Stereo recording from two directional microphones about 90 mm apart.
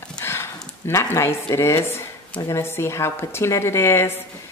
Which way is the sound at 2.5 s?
30° left (ahead or behind).